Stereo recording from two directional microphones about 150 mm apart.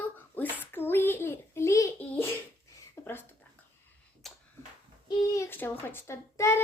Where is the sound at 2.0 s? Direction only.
15° left (ahead or behind).